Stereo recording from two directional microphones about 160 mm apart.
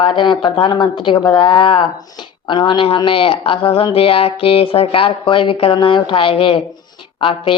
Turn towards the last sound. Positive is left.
turn(degrees=35)  # may be behind; listen again after turning